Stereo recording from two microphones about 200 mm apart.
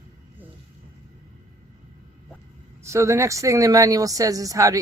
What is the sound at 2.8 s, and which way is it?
Speech, 15° right (ahead or behind).